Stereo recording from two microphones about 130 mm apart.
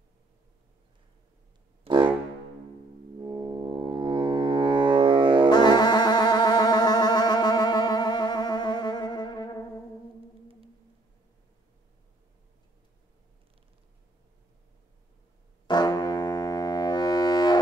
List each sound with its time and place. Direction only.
1.9 s music: 50° right (ahead or behind)
3.2 s music: 30° right (ahead or behind)
5.5 s music: 30° left (ahead or behind)
15.6 s music: 35° left (ahead or behind)